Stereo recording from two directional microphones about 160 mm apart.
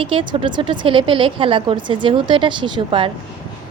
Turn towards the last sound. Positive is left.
turn(degrees=-30)  # may be behind; listen again after turning